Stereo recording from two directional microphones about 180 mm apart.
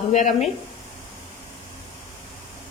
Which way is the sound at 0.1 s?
40° left (ahead or behind).